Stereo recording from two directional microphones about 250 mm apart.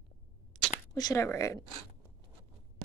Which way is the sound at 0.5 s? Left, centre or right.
Centre.